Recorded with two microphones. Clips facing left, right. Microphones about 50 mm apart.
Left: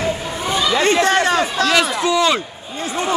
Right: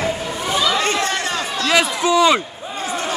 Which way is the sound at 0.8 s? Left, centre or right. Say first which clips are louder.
Left 5 dB; left.